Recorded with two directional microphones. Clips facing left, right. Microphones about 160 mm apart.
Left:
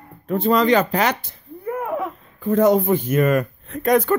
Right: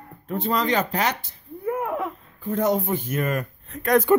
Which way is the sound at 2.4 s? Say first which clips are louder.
Left 7 dB; 90° left.